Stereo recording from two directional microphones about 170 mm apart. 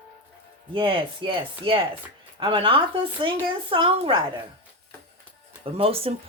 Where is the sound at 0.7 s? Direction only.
30° right (ahead or behind).